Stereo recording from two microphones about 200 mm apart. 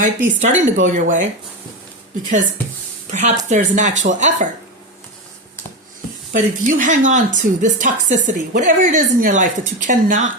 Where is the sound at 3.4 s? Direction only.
40° right (ahead or behind).